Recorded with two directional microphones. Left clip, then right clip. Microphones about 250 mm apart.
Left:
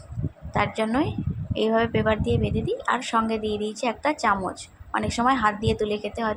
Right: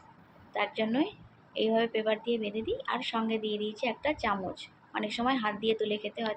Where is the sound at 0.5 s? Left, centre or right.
Centre.